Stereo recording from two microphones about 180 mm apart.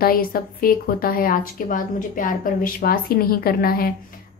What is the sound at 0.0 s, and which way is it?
A woman's voice, 55° left (ahead or behind).